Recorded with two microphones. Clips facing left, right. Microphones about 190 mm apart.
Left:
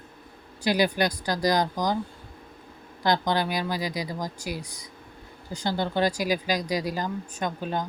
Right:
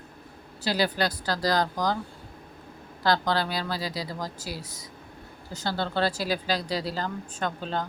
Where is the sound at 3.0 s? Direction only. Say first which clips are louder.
Left 1 dB; 15° left (ahead or behind).